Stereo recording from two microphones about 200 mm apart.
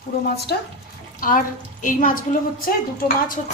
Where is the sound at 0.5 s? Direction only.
50° left (ahead or behind).